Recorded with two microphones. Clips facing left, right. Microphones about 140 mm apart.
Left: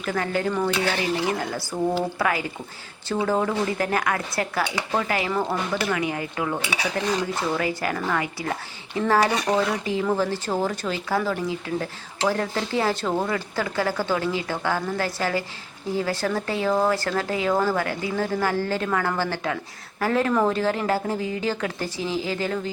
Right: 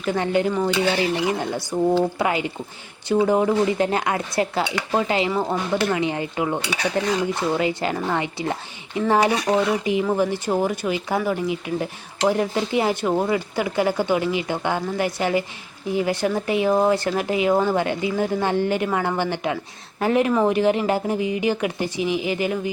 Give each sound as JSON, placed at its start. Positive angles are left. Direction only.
{"t": 0.0, "sound": "speech", "side_deg": -20}
{"t": 9.3, "sound": "speech", "side_deg": 0}
{"t": 9.6, "sound": "speech", "side_deg": -15}